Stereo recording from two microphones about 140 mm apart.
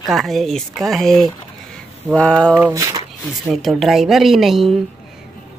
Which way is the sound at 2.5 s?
20° right (ahead or behind).